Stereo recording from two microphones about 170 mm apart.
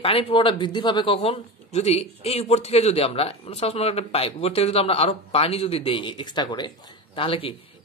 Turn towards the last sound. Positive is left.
turn(degrees=30)  # may be behind; listen again after turning